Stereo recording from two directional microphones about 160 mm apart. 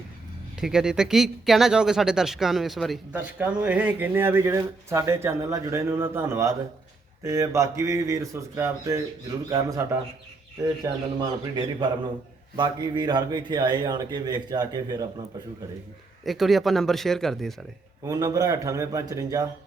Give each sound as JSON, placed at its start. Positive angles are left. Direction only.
{"t": 0.6, "sound": "speech", "side_deg": -5}
{"t": 3.2, "sound": "a man's voice", "side_deg": -10}
{"t": 11.2, "sound": "a man's voice", "side_deg": -25}
{"t": 16.2, "sound": "speech", "side_deg": 0}
{"t": 18.0, "sound": "a man's voice", "side_deg": -20}